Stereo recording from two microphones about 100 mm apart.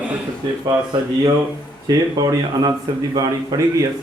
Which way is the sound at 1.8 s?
40° right (ahead or behind).